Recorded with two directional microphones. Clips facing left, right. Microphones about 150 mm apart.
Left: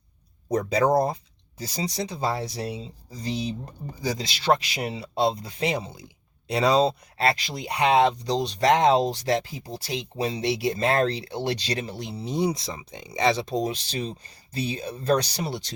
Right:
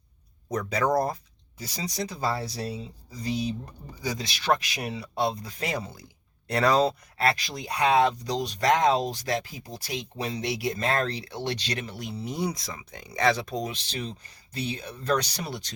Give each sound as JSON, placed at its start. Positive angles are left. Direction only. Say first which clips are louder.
{"t": 0.5, "sound": "speech", "louder": "left 4 dB", "side_deg": 30}
{"t": 7.2, "sound": "speech", "louder": "left 2 dB", "side_deg": 25}